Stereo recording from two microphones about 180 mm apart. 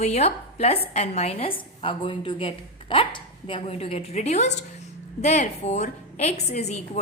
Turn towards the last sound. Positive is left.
turn(degrees=35)  # may be behind; listen again after turning